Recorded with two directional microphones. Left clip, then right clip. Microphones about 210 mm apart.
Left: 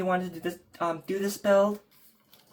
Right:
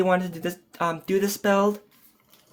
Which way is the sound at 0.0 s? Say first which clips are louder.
Right 6 dB; 60° right (ahead or behind).